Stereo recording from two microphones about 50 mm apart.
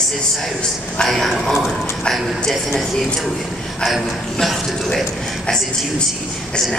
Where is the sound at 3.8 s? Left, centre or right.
Centre.